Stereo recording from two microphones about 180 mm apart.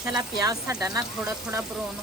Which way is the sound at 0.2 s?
20° right (ahead or behind).